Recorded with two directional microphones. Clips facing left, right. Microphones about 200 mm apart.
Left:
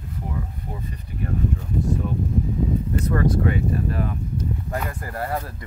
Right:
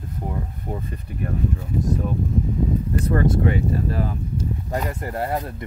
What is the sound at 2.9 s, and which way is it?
Speech, 30° right (ahead or behind).